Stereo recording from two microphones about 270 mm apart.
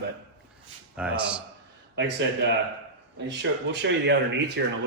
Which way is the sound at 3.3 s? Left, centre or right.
Right.